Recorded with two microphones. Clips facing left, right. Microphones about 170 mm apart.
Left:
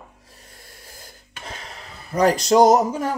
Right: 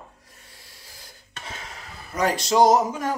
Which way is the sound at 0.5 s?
50° left (ahead or behind).